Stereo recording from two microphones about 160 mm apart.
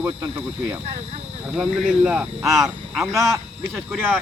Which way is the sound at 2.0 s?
5° right (ahead or behind).